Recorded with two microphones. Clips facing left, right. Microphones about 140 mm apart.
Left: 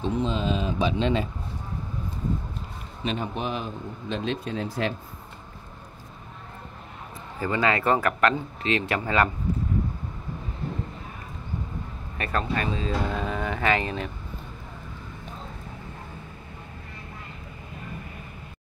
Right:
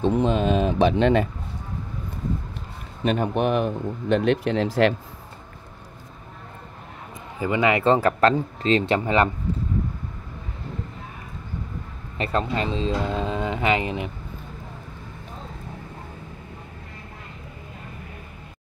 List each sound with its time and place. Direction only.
0.0 s speech: 55° right (ahead or behind)
3.0 s speech: 55° right (ahead or behind); by 4.9 s 75° right (ahead or behind)
7.3 s speech: 15° right (ahead or behind)
12.2 s speech: 25° right (ahead or behind)